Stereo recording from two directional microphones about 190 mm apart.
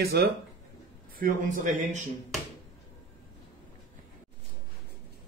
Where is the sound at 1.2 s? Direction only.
40° right (ahead or behind).